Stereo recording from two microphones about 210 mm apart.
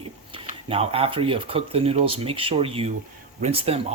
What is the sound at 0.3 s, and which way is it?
Speech, 25° right (ahead or behind).